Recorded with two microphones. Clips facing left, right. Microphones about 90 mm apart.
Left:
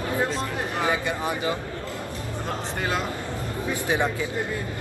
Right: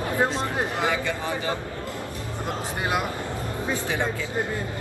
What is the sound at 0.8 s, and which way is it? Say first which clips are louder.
Speech: left 4 dB; 20° left (ahead or behind).